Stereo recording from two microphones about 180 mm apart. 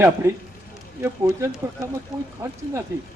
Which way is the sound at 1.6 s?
15° right (ahead or behind).